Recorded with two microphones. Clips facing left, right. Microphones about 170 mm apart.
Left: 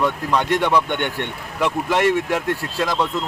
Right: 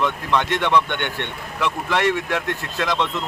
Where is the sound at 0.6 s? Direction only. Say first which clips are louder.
Left 1 dB; 10° left (ahead or behind).